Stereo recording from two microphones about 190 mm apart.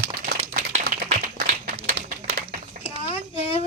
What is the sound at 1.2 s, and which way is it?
Applause, 45° right (ahead or behind).